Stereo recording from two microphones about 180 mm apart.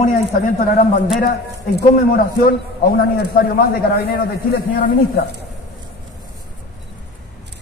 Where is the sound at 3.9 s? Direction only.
60° left (ahead or behind).